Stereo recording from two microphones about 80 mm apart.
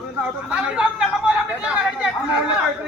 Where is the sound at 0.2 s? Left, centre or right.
Centre.